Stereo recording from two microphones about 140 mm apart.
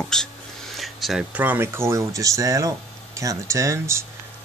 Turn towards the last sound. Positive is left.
turn(degrees=-20)  # may be behind; listen again after turning